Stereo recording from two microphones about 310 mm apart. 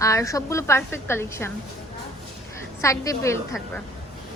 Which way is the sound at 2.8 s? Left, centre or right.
Centre.